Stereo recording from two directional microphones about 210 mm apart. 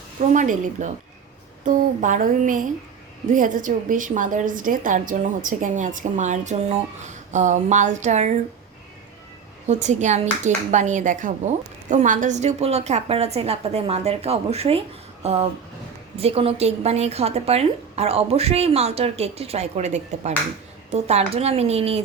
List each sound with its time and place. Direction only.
0.2 s a woman's voice: 35° right (ahead or behind)
9.6 s a woman's voice: 35° right (ahead or behind)